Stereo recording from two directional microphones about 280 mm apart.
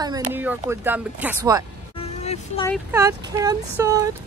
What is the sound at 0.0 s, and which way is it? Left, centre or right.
Speech, centre.